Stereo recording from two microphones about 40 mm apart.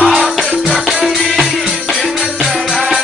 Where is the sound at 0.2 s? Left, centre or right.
Centre.